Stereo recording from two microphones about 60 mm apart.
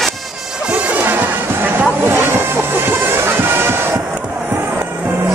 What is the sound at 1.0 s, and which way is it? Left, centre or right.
Music, right.